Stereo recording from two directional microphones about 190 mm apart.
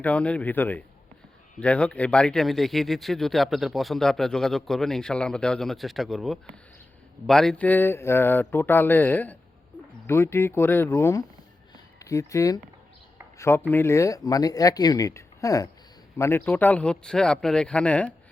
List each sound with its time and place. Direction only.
0.0 s speech: 5° left (ahead or behind)